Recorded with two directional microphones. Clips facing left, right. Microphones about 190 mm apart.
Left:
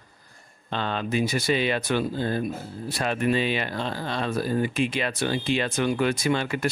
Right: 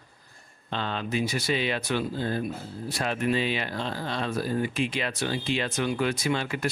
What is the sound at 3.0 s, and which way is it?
A man's voice, 55° left (ahead or behind).